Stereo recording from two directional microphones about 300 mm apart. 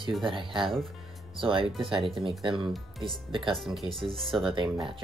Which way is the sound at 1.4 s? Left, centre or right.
Centre.